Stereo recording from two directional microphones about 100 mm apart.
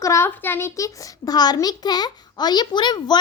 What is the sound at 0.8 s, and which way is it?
A child's voice, 35° left (ahead or behind).